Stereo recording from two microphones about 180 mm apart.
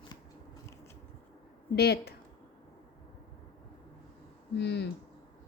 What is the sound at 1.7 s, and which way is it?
Speech, 65° left (ahead or behind).